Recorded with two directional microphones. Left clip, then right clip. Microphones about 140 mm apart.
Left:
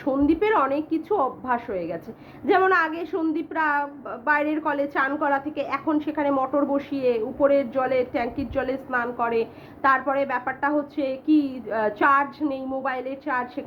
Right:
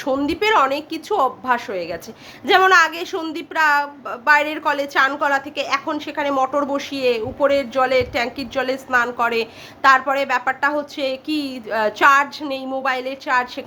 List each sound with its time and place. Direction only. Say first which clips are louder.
0.0 s a woman's voice: right 2 dB; 15° right (ahead or behind)